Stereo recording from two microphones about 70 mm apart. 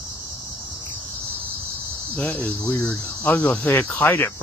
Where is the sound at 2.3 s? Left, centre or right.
Left.